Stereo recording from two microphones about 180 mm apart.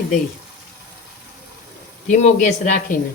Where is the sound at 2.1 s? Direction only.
40° left (ahead or behind).